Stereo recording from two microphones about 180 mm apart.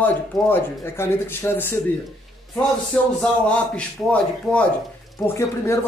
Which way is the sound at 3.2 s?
5° left (ahead or behind).